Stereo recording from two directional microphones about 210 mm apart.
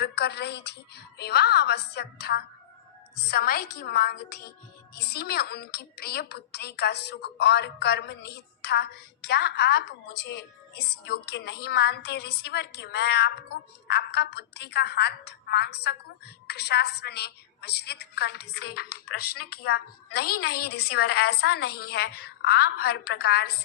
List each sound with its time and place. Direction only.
0.0 s a woman's voice: 50° left (ahead or behind)
18.9 s speech: 90° left
20.9 s a woman's voice: 50° left (ahead or behind)